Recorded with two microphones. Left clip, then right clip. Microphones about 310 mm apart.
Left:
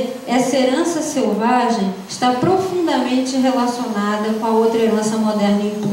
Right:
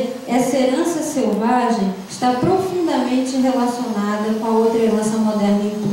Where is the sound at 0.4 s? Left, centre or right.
Centre.